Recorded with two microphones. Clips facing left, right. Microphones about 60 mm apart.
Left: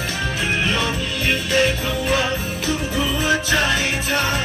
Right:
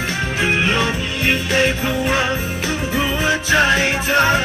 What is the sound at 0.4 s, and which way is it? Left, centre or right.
Music, right.